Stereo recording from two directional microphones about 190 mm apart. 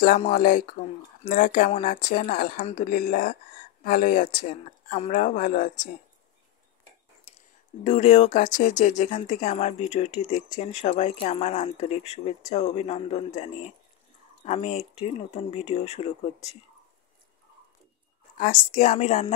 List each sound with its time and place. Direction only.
0.2 s speech: 45° left (ahead or behind)
7.8 s speech: 40° left (ahead or behind)
18.4 s speech: 40° left (ahead or behind)